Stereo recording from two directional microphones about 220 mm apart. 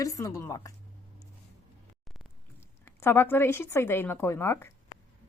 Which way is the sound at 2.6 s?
10° left (ahead or behind).